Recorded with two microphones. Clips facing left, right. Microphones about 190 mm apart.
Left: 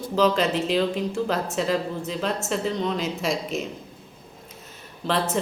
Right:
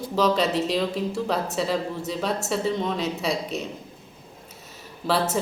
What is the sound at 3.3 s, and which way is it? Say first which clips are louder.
Speech: left 1 dB; 35° right (ahead or behind).